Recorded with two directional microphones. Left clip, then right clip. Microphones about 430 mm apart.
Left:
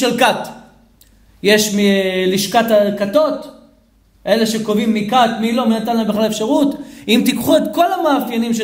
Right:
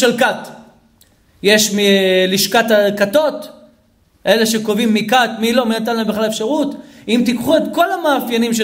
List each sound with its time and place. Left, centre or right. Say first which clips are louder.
0.0 s a man's voice: even; centre